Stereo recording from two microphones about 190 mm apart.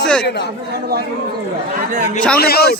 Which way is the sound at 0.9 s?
55° right (ahead or behind).